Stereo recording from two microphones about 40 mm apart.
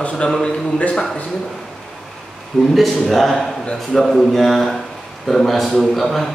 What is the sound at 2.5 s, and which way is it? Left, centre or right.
A man's voice, centre.